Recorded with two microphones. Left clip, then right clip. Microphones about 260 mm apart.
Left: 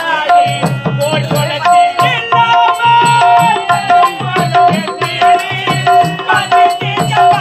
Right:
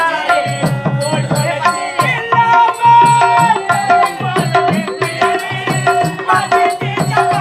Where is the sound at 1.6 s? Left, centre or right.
Centre.